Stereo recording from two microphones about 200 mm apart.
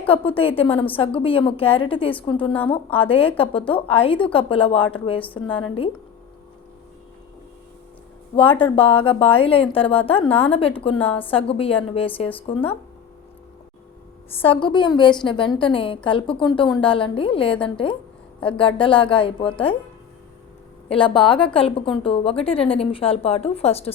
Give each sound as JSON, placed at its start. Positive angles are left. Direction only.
{"t": 0.1, "sound": "a woman's voice", "side_deg": 25}
{"t": 8.4, "sound": "a woman's voice", "side_deg": 25}
{"t": 14.4, "sound": "a woman's voice", "side_deg": 25}
{"t": 20.9, "sound": "a woman's voice", "side_deg": 25}